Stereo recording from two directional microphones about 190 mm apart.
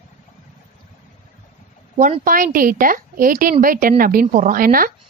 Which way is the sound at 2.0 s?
45° right (ahead or behind).